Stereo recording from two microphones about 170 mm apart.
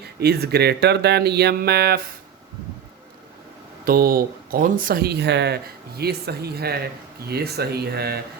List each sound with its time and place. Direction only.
0.0 s speech: 70° right (ahead or behind)
3.8 s speech: 60° right (ahead or behind); by 5.5 s 85° right
6.0 s speech: 70° right (ahead or behind)